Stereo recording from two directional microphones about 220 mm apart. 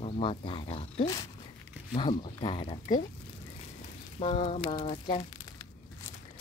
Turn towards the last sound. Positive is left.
turn(degrees=20)  # may be behind; listen again after turning